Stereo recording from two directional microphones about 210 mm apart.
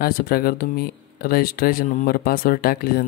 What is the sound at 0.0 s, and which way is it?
Speech, 45° left (ahead or behind).